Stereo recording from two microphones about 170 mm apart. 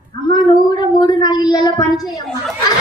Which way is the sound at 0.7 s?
25° left (ahead or behind).